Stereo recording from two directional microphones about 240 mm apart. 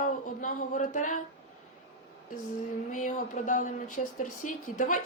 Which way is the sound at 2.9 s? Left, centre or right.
Left.